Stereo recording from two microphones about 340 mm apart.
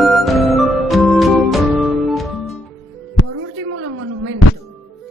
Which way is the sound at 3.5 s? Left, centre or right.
Right.